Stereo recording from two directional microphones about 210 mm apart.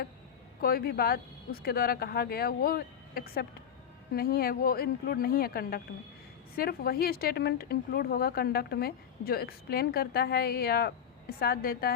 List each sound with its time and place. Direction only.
0.6 s a woman's voice: 45° left (ahead or behind)